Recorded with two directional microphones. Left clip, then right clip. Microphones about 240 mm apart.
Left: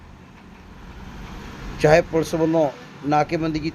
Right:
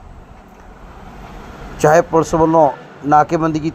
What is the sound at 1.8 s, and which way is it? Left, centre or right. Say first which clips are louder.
A man's voice: right 5 dB; centre.